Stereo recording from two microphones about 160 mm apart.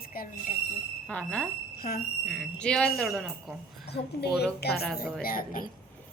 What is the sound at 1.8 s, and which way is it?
Speech, 65° left (ahead or behind).